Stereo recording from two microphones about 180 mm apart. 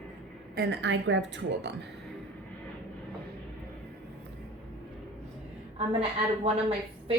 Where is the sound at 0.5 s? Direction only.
65° right (ahead or behind); by 1.7 s 80° right.